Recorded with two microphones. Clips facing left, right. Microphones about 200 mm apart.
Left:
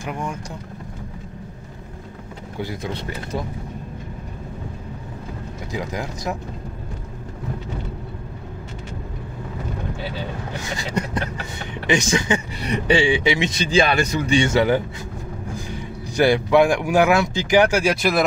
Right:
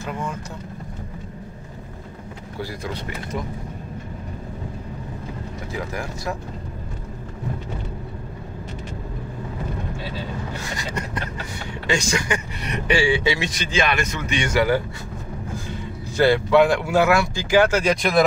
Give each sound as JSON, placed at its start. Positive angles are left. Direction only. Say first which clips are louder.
{"t": 0.0, "sound": "speech", "louder": "left 1 dB", "side_deg": 15}
{"t": 2.6, "sound": "speech", "louder": "left 2 dB", "side_deg": 25}
{"t": 5.7, "sound": "speech", "louder": "left 2 dB", "side_deg": 20}
{"t": 11.9, "sound": "speech", "louder": "left 3 dB", "side_deg": 20}
{"t": 12.6, "sound": "speech", "louder": "left 3 dB", "side_deg": 30}
{"t": 13.0, "sound": "speech", "louder": "left 2 dB", "side_deg": 15}